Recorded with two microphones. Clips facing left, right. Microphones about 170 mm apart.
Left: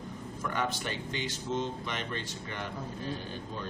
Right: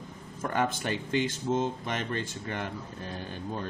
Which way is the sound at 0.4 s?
50° right (ahead or behind).